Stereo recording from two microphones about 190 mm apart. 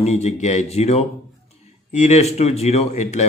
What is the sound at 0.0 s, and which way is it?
Speech, 35° left (ahead or behind).